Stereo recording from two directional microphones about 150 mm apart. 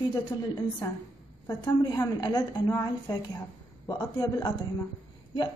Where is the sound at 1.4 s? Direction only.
30° left (ahead or behind).